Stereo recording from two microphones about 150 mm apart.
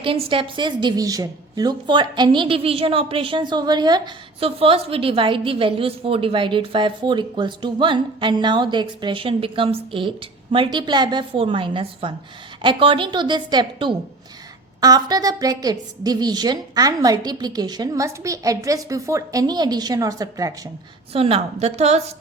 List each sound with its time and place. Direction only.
0.0 s a woman's voice: 35° right (ahead or behind)
21.1 s a woman's voice: 40° right (ahead or behind)